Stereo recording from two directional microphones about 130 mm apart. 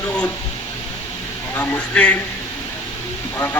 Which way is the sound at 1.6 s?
10° left (ahead or behind).